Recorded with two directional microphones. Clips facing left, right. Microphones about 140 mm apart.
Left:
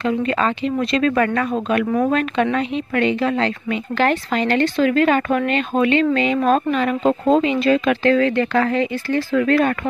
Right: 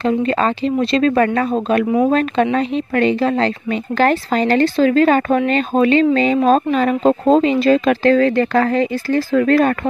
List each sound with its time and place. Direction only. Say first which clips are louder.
0.0 s speech: right 3 dB; 35° right (ahead or behind)